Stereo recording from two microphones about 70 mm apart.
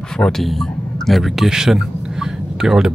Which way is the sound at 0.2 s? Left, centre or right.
Centre.